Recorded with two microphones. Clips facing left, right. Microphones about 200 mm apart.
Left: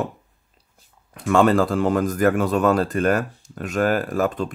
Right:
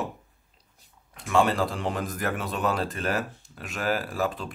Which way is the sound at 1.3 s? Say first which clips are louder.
Left 7 dB; 50° left (ahead or behind).